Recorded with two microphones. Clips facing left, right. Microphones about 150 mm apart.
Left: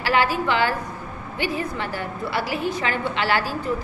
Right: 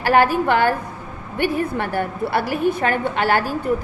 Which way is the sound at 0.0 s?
50° right (ahead or behind).